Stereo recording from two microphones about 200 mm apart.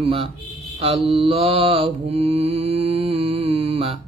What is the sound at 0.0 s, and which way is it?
Speech, 30° right (ahead or behind).